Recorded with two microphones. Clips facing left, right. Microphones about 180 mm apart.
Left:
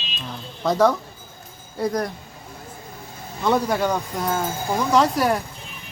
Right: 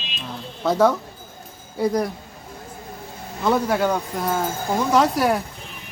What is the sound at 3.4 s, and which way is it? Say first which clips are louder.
Speech: right 1 dB; centre (ahead or behind).